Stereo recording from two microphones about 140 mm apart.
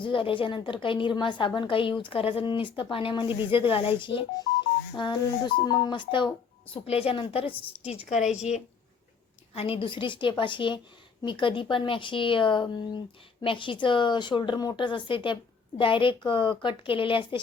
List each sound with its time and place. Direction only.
0.0 s a woman's voice: 40° left (ahead or behind)
8.2 s a woman's voice: 5° right (ahead or behind)
9.6 s a woman's voice: 40° left (ahead or behind)